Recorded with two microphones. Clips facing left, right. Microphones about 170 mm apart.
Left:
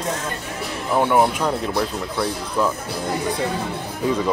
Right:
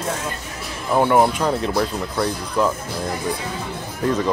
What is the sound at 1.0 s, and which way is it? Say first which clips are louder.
Speech: right 2 dB; 5° right (ahead or behind).